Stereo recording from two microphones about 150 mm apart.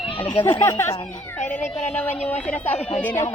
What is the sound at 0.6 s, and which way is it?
Speech, 15° left (ahead or behind).